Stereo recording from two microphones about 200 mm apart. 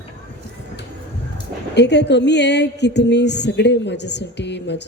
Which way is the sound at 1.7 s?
60° left (ahead or behind).